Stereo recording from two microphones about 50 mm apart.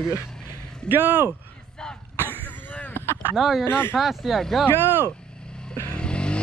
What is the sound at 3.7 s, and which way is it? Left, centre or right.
Speech, left.